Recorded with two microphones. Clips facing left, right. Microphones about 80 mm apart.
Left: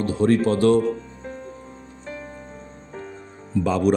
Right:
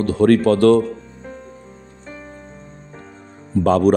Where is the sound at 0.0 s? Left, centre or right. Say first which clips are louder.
Right 5 dB; right.